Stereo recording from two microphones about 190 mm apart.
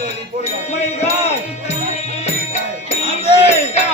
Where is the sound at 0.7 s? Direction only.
35° left (ahead or behind).